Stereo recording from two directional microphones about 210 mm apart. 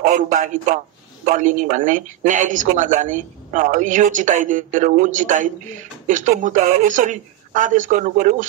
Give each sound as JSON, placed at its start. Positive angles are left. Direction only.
{"t": 0.1, "sound": "speech", "side_deg": -40}